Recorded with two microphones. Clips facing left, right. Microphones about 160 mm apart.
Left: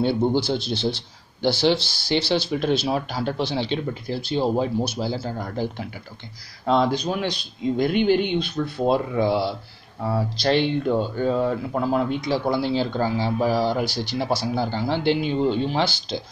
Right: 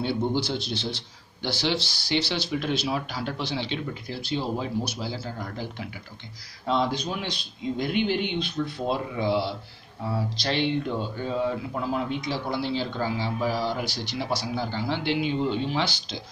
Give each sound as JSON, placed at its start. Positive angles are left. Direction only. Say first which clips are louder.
{"t": 0.5, "sound": "speech", "louder": "left 6 dB", "side_deg": 30}